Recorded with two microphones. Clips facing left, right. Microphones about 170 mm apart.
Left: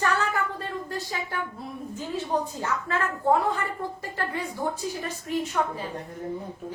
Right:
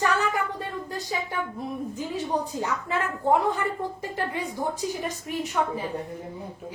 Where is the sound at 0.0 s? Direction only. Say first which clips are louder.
Right 1 dB; 15° right (ahead or behind).